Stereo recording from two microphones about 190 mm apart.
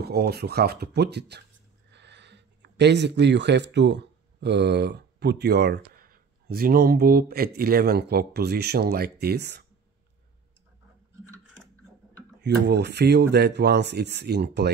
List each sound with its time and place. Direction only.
0.0 s speech: 55° right (ahead or behind)
12.4 s speech: 60° right (ahead or behind)